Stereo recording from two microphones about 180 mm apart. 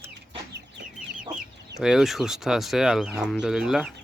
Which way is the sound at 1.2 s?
5° right (ahead or behind).